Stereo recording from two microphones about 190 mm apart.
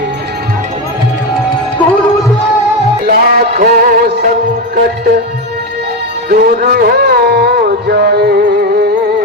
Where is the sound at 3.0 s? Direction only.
55° right (ahead or behind).